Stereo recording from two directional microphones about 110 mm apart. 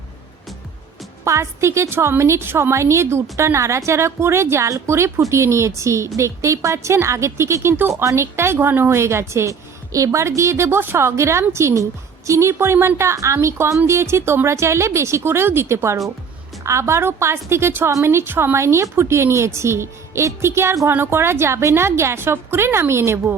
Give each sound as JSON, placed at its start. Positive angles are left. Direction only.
{"t": 1.2, "sound": "a woman's voice", "side_deg": -25}